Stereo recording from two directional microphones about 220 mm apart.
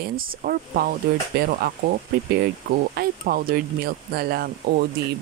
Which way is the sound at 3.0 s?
45° right (ahead or behind).